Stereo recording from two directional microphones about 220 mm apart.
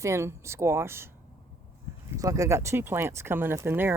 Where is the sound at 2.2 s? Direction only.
15° right (ahead or behind).